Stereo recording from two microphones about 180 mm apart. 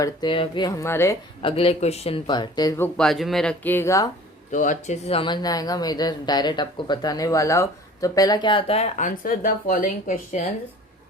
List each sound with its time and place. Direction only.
0.0 s speech: 25° left (ahead or behind)
1.4 s speech: 30° left (ahead or behind)
4.5 s speech: 45° left (ahead or behind)